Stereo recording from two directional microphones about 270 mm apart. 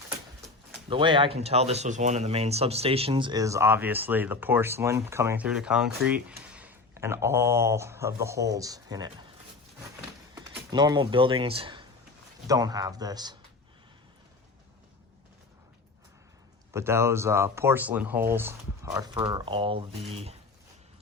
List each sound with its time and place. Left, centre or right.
0.9 s speech: centre
10.3 s speech: centre
16.7 s speech: centre